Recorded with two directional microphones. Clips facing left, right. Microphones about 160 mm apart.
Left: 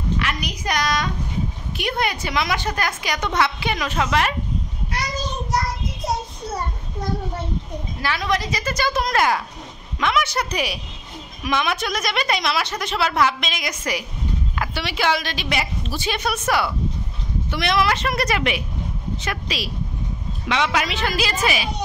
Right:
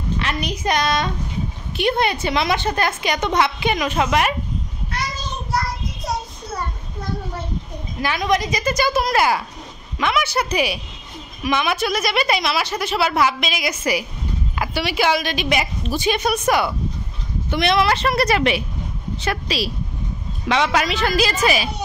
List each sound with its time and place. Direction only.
0.2 s a woman's voice: 30° right (ahead or behind)
8.0 s a woman's voice: 15° right (ahead or behind); by 21.6 s 40° right (ahead or behind)